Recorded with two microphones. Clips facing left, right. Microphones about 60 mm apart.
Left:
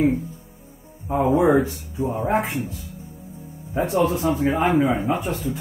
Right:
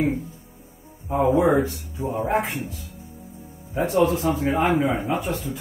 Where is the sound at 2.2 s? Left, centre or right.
Left.